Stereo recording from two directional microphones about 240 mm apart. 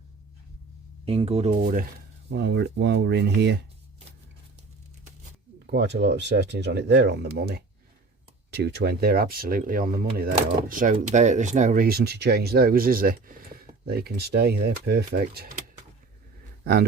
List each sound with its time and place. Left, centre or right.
1.0 s speech: right
5.7 s speech: right